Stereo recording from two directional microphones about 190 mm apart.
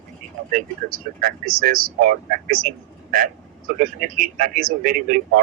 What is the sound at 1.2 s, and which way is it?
A man's voice, 50° right (ahead or behind).